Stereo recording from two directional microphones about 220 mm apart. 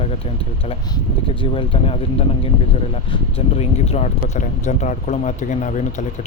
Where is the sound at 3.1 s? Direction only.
25° left (ahead or behind).